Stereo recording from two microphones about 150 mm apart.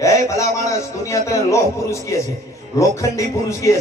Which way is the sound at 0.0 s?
20° left (ahead or behind).